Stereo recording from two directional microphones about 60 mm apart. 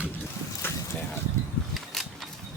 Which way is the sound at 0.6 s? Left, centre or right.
Left.